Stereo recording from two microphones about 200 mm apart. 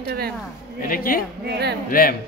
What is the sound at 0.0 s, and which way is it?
Speech, 50° right (ahead or behind).